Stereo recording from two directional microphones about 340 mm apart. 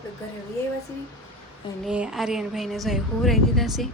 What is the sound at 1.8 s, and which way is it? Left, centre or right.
Speech, centre.